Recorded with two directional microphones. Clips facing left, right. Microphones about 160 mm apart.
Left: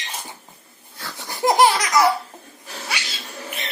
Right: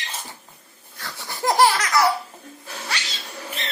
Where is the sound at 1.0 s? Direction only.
20° left (ahead or behind).